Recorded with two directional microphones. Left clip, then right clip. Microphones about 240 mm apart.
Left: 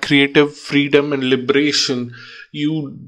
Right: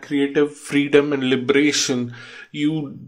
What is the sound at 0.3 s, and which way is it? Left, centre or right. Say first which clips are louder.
Speech: left 5 dB; centre.